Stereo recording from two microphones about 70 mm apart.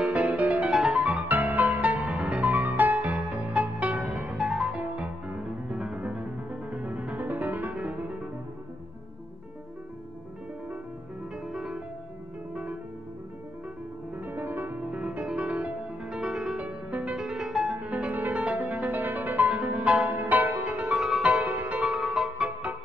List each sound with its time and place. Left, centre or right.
0.0 s music: right
0.7 s music: centre
1.0 s music: right
4.3 s music: centre
6.0 s music: centre
7.2 s music: right
11.4 s music: centre
14.1 s music: right
14.8 s music: centre
17.8 s music: right
21.8 s music: centre